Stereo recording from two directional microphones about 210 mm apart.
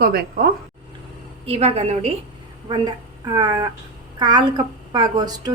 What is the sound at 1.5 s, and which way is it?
A woman's voice, 30° right (ahead or behind).